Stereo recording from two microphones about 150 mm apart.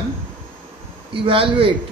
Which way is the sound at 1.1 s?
35° right (ahead or behind).